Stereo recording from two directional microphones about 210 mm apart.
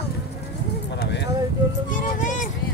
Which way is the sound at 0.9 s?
55° left (ahead or behind).